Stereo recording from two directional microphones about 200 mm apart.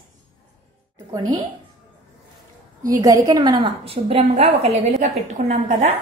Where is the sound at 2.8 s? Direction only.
15° right (ahead or behind); by 5.9 s 35° right (ahead or behind).